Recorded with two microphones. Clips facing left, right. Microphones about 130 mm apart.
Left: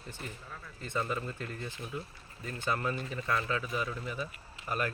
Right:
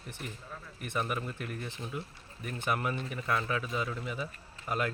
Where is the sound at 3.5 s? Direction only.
15° right (ahead or behind).